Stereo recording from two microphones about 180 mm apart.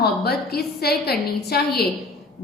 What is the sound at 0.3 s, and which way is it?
A woman's voice, 60° left (ahead or behind).